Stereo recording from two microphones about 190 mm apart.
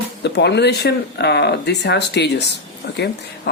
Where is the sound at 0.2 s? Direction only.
65° left (ahead or behind).